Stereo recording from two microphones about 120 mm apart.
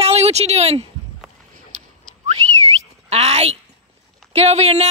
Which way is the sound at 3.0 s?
60° right (ahead or behind).